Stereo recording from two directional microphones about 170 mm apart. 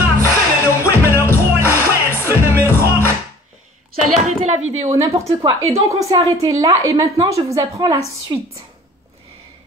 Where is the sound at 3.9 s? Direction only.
45° right (ahead or behind).